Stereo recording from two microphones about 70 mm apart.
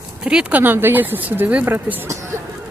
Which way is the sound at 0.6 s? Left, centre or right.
Right.